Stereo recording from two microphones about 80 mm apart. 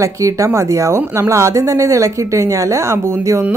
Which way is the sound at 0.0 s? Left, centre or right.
Right.